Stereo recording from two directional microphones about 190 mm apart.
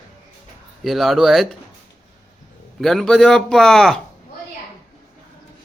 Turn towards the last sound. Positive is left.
turn(degrees=5)  # may be behind; listen again after turning